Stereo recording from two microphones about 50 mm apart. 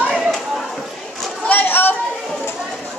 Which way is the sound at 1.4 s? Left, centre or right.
Left.